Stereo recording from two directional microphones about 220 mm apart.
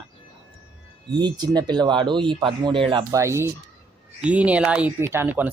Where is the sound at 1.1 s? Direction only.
20° right (ahead or behind).